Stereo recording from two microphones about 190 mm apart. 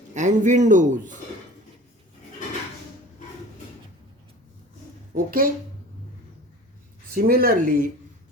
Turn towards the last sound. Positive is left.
turn(degrees=-50)  # may be behind; listen again after turning